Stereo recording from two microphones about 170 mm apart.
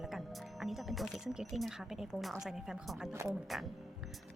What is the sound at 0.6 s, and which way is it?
Speech, centre (ahead or behind).